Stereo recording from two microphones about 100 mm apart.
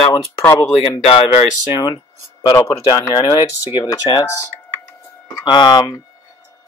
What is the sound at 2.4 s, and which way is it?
Speech, 40° left (ahead or behind).